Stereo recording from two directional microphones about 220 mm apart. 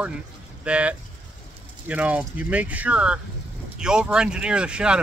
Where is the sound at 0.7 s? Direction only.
5° right (ahead or behind).